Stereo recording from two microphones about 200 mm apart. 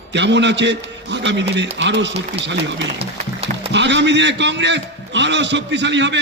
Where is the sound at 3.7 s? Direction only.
60° right (ahead or behind).